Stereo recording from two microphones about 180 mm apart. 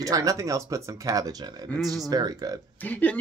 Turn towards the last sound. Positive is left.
turn(degrees=10)  # may be behind; listen again after turning